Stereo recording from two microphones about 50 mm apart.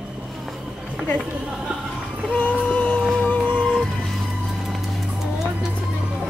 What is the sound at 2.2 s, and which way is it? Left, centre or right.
Music, left.